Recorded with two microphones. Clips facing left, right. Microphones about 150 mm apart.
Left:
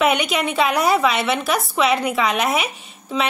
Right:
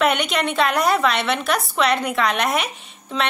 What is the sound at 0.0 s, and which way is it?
A woman's voice, 5° left (ahead or behind).